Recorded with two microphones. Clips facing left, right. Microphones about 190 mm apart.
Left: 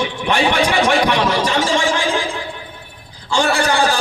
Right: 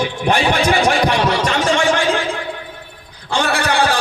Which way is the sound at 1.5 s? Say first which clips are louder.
Right 1 dB; 65° right (ahead or behind).